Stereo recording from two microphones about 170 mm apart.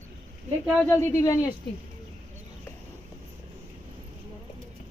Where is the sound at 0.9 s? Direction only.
15° left (ahead or behind).